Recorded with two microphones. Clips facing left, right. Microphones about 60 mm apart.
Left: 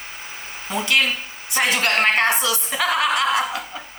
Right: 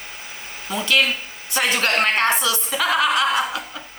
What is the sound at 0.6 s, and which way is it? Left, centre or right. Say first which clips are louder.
Speech: even; left.